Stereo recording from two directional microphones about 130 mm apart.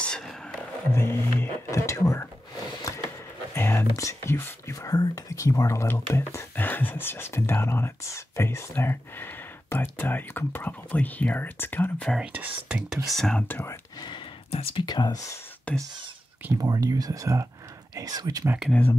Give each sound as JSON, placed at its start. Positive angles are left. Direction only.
{"t": 0.0, "sound": "a sound", "side_deg": 5}
{"t": 0.9, "sound": "a sound", "side_deg": 20}
{"t": 3.5, "sound": "speech", "side_deg": 20}
{"t": 12.6, "sound": "speech", "side_deg": -5}
{"t": 13.9, "sound": "a sound", "side_deg": 35}
{"t": 14.5, "sound": "speech", "side_deg": 45}
{"t": 15.7, "sound": "speech", "side_deg": 10}
{"t": 16.5, "sound": "speech", "side_deg": -30}
{"t": 18.7, "sound": "speech", "side_deg": 10}